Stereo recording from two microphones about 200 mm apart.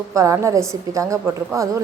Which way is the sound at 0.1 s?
15° right (ahead or behind).